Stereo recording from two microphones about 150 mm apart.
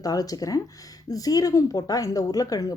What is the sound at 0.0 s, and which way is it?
Speech, 25° left (ahead or behind).